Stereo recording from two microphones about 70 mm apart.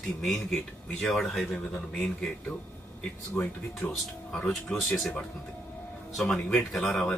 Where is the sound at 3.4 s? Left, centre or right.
Left.